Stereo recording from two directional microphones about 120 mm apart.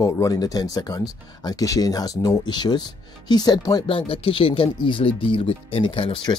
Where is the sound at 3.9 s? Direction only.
50° left (ahead or behind).